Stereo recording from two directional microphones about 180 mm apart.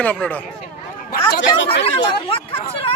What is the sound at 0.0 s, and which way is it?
Speech, 10° left (ahead or behind).